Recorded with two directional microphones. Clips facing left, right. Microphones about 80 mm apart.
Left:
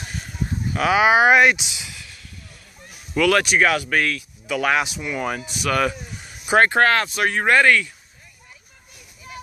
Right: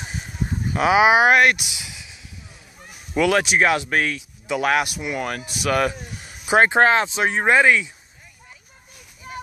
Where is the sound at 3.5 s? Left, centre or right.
Centre.